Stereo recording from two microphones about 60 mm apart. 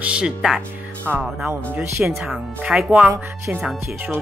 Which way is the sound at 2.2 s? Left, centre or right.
Centre.